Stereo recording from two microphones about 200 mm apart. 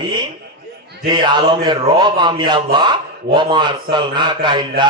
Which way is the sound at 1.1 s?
20° right (ahead or behind).